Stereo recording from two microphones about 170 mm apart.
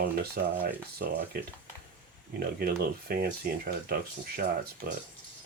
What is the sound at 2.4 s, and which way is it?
Speech, 65° right (ahead or behind).